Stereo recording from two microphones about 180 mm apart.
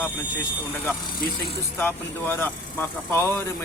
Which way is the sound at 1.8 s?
10° left (ahead or behind).